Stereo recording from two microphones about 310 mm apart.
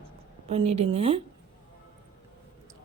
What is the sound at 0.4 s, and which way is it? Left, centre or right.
Speech, centre.